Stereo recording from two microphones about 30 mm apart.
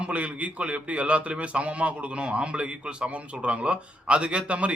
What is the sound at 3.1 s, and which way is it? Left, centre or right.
A man's voice, right.